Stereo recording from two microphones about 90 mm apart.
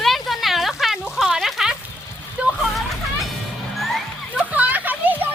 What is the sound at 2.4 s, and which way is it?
Hubbub, 15° right (ahead or behind).